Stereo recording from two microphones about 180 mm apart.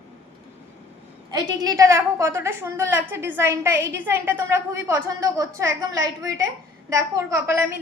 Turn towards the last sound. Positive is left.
turn(degrees=-15)  # may be behind; listen again after turning